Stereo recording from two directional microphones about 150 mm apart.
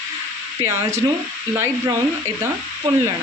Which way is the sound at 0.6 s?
20° right (ahead or behind).